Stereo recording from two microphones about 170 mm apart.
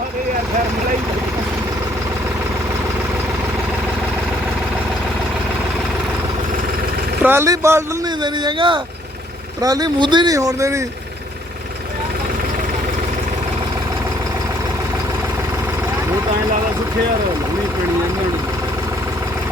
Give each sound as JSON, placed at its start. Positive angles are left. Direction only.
{"t": 7.2, "sound": "speech", "side_deg": -15}
{"t": 8.4, "sound": "speech", "side_deg": -30}